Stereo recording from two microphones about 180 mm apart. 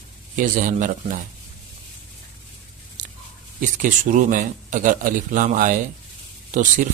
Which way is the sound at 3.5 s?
45° right (ahead or behind).